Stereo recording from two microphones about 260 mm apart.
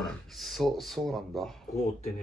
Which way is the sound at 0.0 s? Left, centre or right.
Centre.